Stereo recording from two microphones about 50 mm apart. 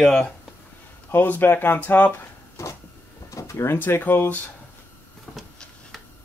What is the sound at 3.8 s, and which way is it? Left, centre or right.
Speech, left.